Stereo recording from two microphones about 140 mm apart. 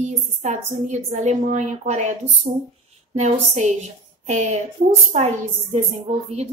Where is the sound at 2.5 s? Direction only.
45° right (ahead or behind).